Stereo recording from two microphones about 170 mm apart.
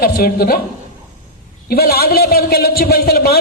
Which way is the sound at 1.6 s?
65° left (ahead or behind).